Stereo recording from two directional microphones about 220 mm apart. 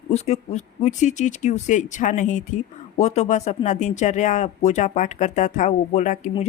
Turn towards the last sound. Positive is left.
turn(degrees=35)  # may be behind; listen again after turning